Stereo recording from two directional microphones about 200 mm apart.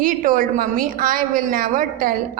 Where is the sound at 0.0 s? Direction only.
40° right (ahead or behind).